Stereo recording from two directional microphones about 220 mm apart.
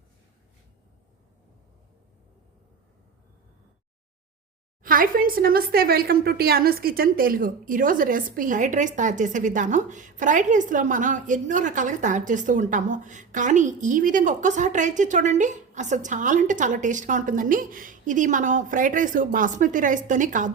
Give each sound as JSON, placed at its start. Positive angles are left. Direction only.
{"t": 4.8, "sound": "speech", "side_deg": -40}